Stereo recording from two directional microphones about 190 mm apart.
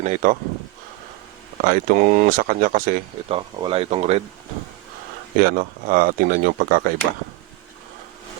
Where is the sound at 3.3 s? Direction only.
30° right (ahead or behind).